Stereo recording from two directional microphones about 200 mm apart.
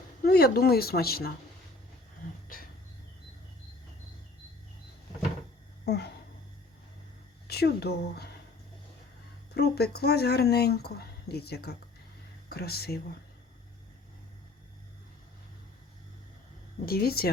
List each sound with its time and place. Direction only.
0.3 s speech: 50° left (ahead or behind)
5.8 s speech: 55° left (ahead or behind)
7.4 s speech: 55° left (ahead or behind)
9.6 s speech: 55° left (ahead or behind)
16.8 s speech: 50° left (ahead or behind)